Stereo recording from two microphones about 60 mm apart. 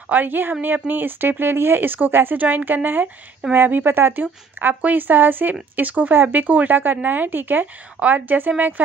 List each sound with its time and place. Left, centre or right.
0.1 s speech: right